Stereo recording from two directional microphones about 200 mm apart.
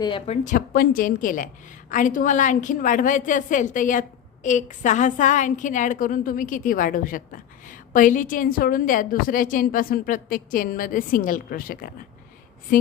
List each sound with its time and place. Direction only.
0.0 s speech: 25° left (ahead or behind)
0.4 s a woman's voice: 45° left (ahead or behind)